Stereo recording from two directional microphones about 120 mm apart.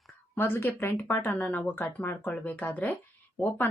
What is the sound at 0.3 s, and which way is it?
Speech, 20° left (ahead or behind).